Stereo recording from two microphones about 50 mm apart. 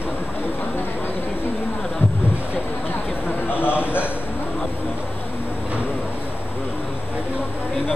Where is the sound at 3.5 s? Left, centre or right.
Left.